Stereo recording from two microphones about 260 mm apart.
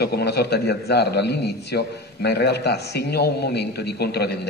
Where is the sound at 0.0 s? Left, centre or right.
Left.